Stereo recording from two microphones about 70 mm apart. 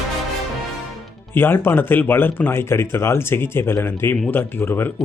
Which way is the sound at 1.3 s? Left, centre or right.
Left.